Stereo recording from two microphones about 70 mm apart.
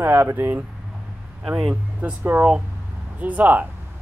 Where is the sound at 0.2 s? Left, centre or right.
Right.